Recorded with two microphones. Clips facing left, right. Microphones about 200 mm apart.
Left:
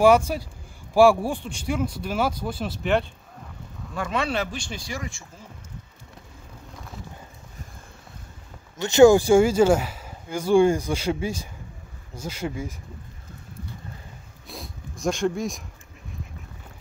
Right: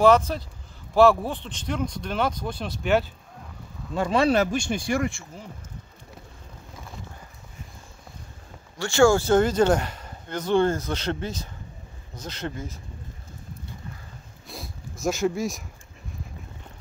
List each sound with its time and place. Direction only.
0.0 s speech: 10° left (ahead or behind)
3.9 s speech: 30° right (ahead or behind); by 5.2 s 60° right (ahead or behind)
8.7 s speech: 20° left (ahead or behind)
14.5 s a sound: centre (ahead or behind)